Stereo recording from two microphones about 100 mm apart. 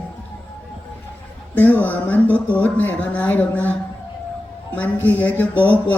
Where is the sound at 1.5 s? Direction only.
15° left (ahead or behind).